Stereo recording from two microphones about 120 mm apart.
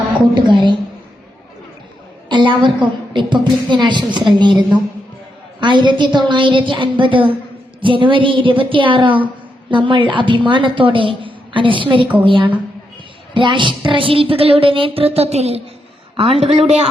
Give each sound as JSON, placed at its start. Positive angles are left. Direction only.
{"t": 0.3, "sound": "a woman's voice", "side_deg": -40}
{"t": 2.3, "sound": "a woman's voice", "side_deg": -40}